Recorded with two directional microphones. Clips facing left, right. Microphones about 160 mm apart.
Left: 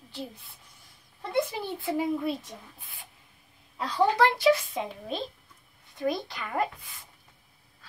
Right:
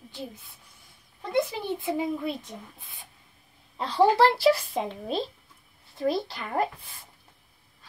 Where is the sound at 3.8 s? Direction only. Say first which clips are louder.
Right 3 dB; 30° right (ahead or behind).